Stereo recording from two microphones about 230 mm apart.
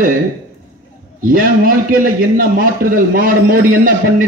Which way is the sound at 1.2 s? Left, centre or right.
Right.